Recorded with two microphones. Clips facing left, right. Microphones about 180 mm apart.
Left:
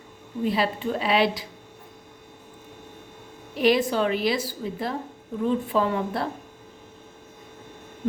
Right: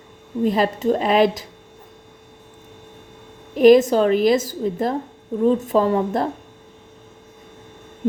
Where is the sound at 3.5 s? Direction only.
45° right (ahead or behind).